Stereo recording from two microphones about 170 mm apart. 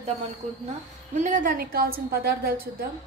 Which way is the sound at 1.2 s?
50° right (ahead or behind).